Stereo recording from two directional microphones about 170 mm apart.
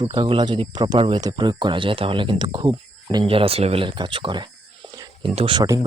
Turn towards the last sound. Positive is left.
turn(degrees=-30)  # may be behind; listen again after turning